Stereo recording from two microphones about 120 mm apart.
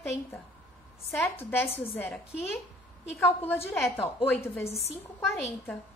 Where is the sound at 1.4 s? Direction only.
20° left (ahead or behind).